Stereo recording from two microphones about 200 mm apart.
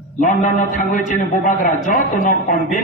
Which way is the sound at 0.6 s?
40° left (ahead or behind).